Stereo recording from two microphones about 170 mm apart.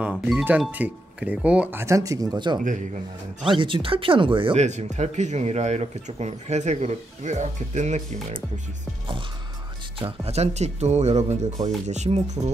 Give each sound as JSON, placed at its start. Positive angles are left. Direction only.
{"t": 0.0, "sound": "speech", "side_deg": -5}
{"t": 4.6, "sound": "speech", "side_deg": -45}
{"t": 9.9, "sound": "speech", "side_deg": -35}